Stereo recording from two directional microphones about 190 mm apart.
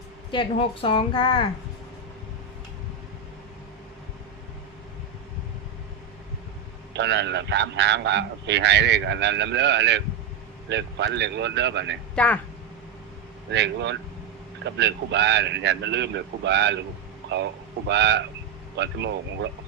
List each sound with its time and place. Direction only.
0.3 s a woman's voice: 25° left (ahead or behind)
6.9 s a man's voice: 65° right (ahead or behind)
12.1 s speech: 5° left (ahead or behind)
13.5 s a man's voice: 65° right (ahead or behind)
17.8 s a man's voice: 65° right (ahead or behind)